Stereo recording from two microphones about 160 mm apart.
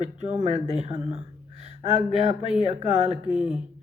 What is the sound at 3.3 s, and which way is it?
Speech, 5° right (ahead or behind).